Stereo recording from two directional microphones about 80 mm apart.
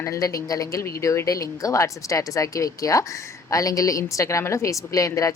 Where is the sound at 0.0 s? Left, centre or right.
Left.